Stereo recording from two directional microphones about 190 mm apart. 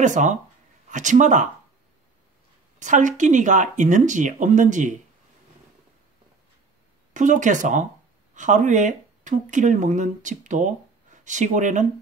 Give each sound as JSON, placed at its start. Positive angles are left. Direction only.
{"t": 0.0, "sound": "speech", "side_deg": -40}
{"t": 2.8, "sound": "speech", "side_deg": -40}
{"t": 7.2, "sound": "speech", "side_deg": -40}